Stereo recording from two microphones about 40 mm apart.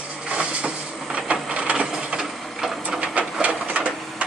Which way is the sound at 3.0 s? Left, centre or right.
Right.